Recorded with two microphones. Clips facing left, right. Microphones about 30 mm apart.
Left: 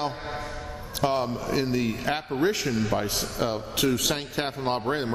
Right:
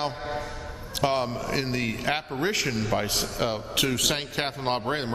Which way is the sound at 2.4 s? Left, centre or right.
Right.